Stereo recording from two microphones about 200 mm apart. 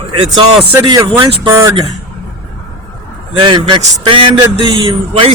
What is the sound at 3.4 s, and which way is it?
A man's voice, 25° right (ahead or behind).